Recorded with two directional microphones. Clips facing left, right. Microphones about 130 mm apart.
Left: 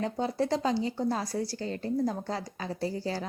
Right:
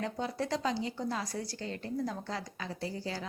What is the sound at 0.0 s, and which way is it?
A woman's voice, 30° left (ahead or behind).